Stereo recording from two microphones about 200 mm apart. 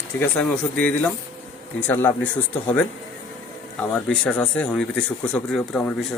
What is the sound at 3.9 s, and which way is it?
Speech, 5° left (ahead or behind).